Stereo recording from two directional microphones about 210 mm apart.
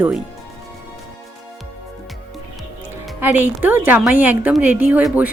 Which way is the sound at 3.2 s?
10° right (ahead or behind).